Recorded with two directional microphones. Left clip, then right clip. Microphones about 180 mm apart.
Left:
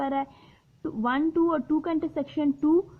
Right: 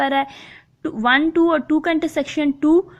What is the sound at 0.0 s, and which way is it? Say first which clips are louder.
A woman's voice: right 10 dB; 20° right (ahead or behind).